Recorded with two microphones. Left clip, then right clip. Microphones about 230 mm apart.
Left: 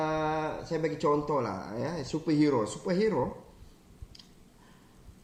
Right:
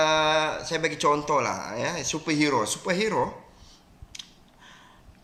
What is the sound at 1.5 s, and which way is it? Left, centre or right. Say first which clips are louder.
Speech: right 6 dB; centre.